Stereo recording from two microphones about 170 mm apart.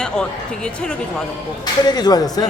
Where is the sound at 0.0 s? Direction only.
5° left (ahead or behind).